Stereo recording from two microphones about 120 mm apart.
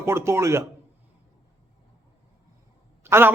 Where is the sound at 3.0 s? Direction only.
20° right (ahead or behind).